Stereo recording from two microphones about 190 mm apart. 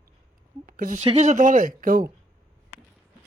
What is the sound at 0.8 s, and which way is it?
Speech, 40° right (ahead or behind).